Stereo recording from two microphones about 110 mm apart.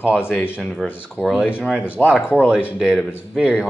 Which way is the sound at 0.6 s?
5° left (ahead or behind).